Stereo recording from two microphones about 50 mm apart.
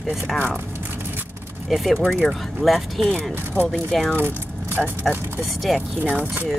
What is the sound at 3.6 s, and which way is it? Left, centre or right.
Speech, left.